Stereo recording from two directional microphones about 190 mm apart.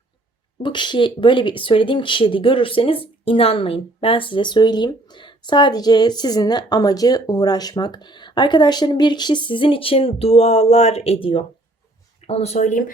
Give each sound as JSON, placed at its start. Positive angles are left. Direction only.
{"t": 0.6, "sound": "speech", "side_deg": 25}